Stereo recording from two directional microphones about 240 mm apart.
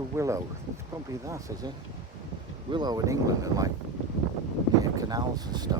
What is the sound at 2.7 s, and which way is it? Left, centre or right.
Speech, centre.